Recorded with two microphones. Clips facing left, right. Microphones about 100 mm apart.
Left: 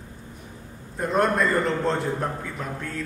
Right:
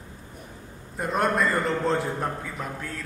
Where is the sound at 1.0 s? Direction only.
Centre (ahead or behind).